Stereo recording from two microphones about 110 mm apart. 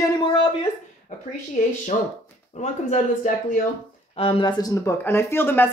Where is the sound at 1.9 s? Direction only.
75° left (ahead or behind).